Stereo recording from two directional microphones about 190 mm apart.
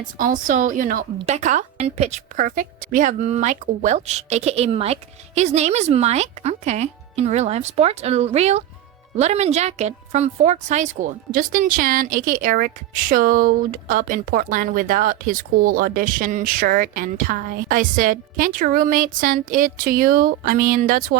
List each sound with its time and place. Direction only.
0.2 s a woman's voice: 45° right (ahead or behind)